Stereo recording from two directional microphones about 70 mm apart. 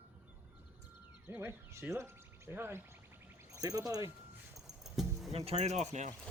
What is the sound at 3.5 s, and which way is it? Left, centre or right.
Speech, right.